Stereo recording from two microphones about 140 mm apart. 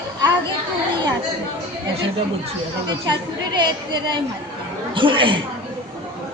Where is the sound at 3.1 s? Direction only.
30° right (ahead or behind).